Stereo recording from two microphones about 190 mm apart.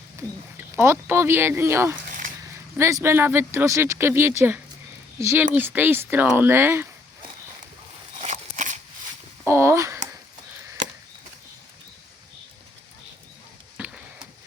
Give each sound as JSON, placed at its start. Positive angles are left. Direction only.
{"t": 0.2, "sound": "a sound", "side_deg": -15}
{"t": 0.8, "sound": "speech", "side_deg": -10}
{"t": 8.2, "sound": "crunch", "side_deg": -40}
{"t": 9.4, "sound": "speech", "side_deg": -15}
{"t": 13.7, "sound": "tick-tock", "side_deg": -5}